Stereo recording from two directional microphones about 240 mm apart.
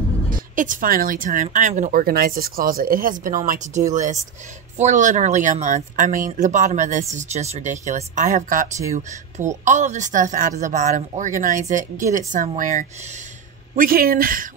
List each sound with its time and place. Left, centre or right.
0.3 s a woman's voice: right